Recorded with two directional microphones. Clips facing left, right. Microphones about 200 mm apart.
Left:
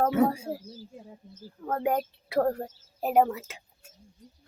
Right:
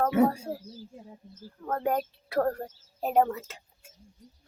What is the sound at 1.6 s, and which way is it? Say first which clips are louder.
Speech: left 1 dB; 10° left (ahead or behind).